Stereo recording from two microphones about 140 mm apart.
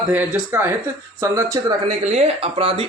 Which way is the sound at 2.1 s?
50° right (ahead or behind).